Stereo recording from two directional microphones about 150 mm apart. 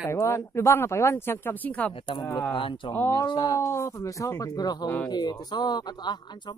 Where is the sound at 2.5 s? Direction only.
35° left (ahead or behind).